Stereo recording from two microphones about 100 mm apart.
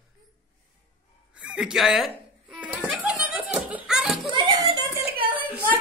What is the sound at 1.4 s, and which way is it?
Speech, 10° right (ahead or behind).